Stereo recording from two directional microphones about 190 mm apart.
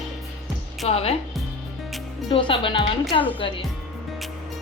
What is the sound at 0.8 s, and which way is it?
Speech, 30° left (ahead or behind).